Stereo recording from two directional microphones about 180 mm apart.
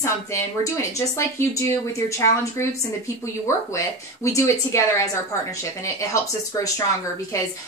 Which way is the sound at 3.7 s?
15° left (ahead or behind).